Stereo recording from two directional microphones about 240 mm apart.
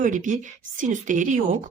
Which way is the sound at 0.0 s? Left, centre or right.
Right.